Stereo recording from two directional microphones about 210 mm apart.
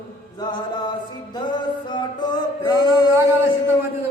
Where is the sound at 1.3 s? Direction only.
20° left (ahead or behind).